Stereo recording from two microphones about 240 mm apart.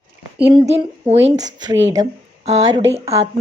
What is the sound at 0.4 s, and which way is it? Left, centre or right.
Speech, right.